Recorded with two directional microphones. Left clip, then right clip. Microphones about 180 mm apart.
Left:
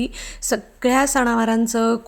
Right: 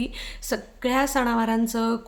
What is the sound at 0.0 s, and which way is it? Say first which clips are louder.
A woman's voice: left 5 dB; 30° left (ahead or behind).